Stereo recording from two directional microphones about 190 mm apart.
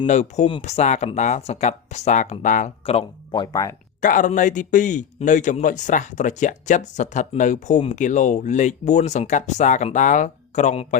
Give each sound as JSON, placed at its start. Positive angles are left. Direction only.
{"t": 0.1, "sound": "speech", "side_deg": 35}
{"t": 4.0, "sound": "speech", "side_deg": 45}